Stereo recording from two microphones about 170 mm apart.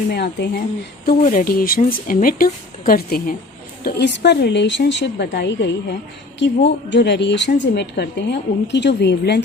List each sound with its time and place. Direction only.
0.1 s speech: 75° left (ahead or behind)
1.0 s speech: 50° left (ahead or behind)
3.8 s a woman's voice: 80° left